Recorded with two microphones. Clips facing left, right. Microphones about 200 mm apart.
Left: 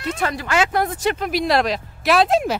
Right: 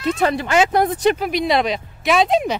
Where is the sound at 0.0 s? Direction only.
25° right (ahead or behind).